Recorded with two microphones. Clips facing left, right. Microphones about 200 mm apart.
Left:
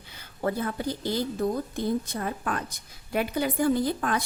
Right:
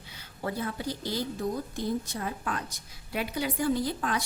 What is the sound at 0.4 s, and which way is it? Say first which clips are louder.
A woman's voice: left 4 dB; 50° left (ahead or behind).